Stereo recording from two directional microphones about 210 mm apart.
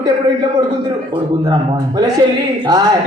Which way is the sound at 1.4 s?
20° right (ahead or behind).